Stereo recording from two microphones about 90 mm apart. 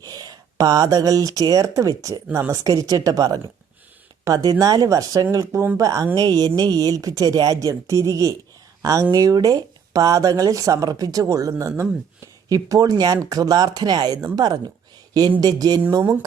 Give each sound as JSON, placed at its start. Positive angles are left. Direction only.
{"t": 0.0, "sound": "speech", "side_deg": -45}